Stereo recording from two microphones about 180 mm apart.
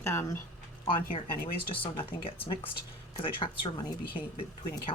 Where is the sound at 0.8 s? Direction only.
30° left (ahead or behind).